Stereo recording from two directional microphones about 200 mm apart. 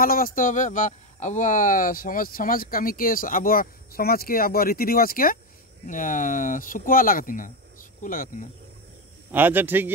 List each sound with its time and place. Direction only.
0.0 s speech: 45° left (ahead or behind)
9.3 s a man's voice: 10° right (ahead or behind)